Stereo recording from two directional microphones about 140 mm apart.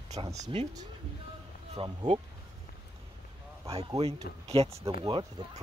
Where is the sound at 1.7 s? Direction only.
40° right (ahead or behind).